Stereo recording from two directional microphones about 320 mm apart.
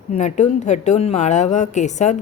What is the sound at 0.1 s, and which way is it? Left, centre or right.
A woman's voice, left.